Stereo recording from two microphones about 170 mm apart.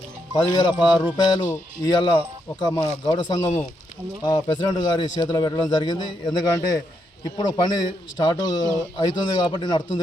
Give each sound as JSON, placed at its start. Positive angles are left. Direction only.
{"t": 0.3, "sound": "a man's voice", "side_deg": 25}